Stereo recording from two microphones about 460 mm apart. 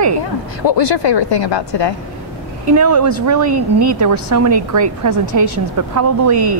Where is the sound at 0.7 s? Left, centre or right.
Left.